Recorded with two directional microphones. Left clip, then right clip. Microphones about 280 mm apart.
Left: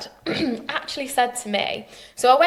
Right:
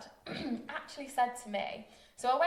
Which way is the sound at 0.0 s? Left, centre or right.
Left.